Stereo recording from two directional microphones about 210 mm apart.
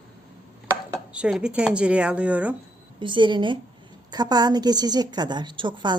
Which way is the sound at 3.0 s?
20° right (ahead or behind).